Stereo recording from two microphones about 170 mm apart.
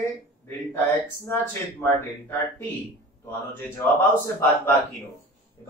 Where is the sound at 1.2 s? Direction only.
15° left (ahead or behind).